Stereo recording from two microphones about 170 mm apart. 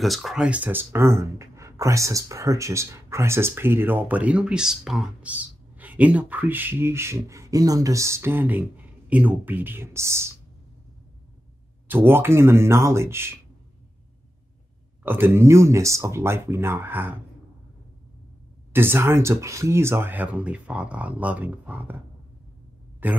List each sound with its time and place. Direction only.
0.0 s speech: centre (ahead or behind); by 10.3 s 15° right (ahead or behind)
11.9 s speech: 15° right (ahead or behind)
15.0 s speech: 10° right (ahead or behind)
18.7 s speech: 15° right (ahead or behind)
23.0 s speech: 10° right (ahead or behind)